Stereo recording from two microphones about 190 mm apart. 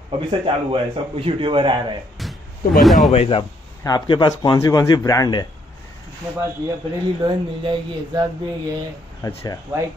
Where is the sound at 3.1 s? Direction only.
30° left (ahead or behind).